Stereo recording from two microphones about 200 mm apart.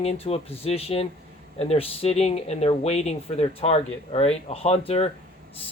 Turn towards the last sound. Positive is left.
turn(degrees=30)  # may be behind; listen again after turning